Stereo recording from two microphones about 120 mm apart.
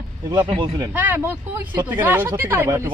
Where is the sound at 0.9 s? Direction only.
15° right (ahead or behind).